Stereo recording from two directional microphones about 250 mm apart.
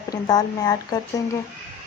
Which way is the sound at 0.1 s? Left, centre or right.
Centre.